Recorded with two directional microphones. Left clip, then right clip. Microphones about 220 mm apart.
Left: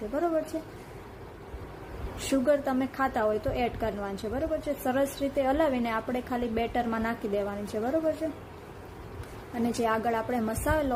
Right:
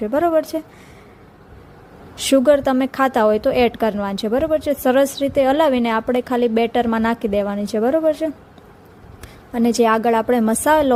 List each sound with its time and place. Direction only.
0.1 s a woman's voice: 45° right (ahead or behind)
2.1 s a woman's voice: 40° right (ahead or behind)
9.6 s a woman's voice: 40° right (ahead or behind)